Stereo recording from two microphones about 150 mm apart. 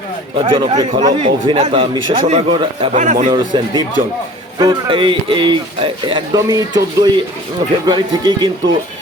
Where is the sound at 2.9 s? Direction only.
55° right (ahead or behind).